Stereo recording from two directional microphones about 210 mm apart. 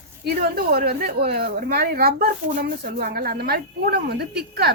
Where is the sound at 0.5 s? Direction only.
45° right (ahead or behind).